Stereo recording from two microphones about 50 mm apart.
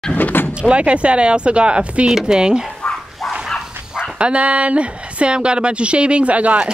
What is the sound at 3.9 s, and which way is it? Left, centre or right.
Speech, centre.